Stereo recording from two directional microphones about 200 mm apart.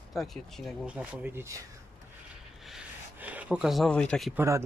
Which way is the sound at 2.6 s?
5° right (ahead or behind).